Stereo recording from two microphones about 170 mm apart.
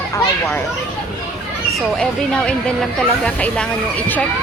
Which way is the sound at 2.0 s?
5° left (ahead or behind).